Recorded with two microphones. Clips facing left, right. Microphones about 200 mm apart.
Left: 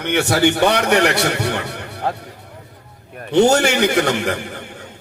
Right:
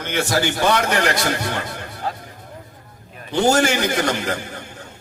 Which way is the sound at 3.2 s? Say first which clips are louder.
Left 4 dB; 70° left (ahead or behind).